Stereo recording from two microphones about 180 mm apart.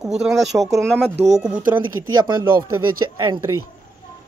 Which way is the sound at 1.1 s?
40° right (ahead or behind).